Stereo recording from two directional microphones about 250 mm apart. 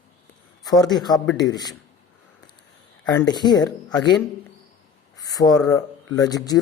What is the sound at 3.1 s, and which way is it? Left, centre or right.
A man's voice, centre.